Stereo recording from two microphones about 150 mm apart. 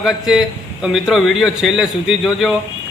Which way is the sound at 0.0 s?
Centre (ahead or behind).